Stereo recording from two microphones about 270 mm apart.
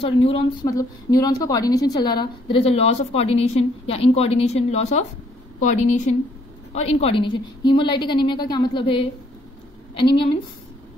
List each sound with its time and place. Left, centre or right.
0.0 s a woman's voice: left